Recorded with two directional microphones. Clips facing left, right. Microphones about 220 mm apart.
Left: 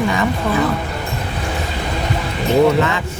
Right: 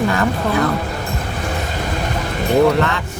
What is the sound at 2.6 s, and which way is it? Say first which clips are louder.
Speech: left 1 dB; centre (ahead or behind).